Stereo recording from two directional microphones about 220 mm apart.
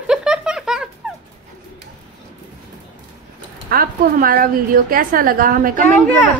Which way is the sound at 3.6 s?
45° right (ahead or behind).